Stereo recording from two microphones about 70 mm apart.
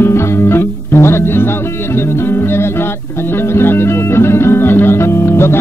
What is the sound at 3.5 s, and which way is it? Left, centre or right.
Music, left.